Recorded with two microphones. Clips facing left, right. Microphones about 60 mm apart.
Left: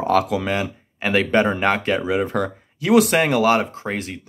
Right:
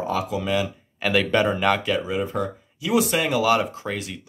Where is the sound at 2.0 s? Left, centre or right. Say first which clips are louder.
Left 4 dB; left.